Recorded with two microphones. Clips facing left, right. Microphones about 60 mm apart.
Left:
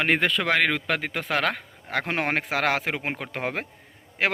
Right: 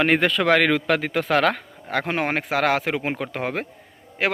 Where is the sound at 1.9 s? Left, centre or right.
Left.